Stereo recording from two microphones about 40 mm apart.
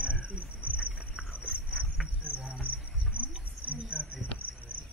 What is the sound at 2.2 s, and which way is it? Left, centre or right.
Cricket, right.